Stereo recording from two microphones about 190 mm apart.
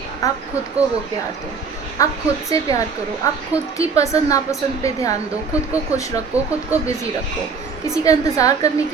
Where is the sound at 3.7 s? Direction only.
15° left (ahead or behind).